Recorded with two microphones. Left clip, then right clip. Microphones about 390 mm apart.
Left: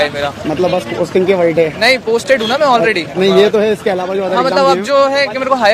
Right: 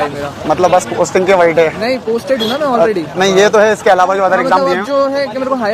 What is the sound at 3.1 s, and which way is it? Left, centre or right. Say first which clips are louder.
Speech: right 2 dB; right.